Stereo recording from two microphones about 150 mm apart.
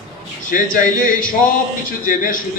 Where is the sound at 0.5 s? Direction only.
65° left (ahead or behind).